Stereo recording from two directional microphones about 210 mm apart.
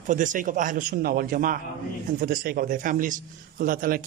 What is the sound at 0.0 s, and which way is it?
A man's voice, 35° right (ahead or behind).